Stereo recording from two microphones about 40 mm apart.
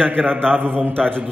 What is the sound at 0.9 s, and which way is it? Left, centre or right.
Speech, left.